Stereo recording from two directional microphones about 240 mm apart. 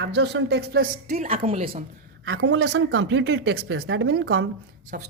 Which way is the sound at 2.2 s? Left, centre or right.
Right.